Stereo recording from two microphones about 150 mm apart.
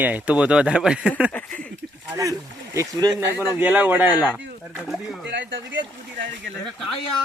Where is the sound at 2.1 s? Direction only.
20° right (ahead or behind); by 5.3 s centre (ahead or behind).